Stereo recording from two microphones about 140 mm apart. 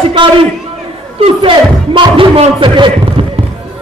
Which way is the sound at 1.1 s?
40° right (ahead or behind).